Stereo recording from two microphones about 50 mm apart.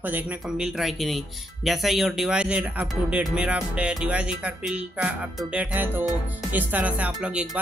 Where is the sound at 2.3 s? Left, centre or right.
Right.